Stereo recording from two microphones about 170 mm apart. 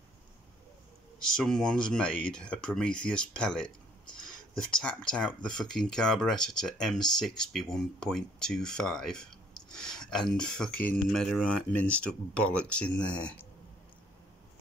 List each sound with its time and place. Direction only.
1.3 s speech: 5° left (ahead or behind)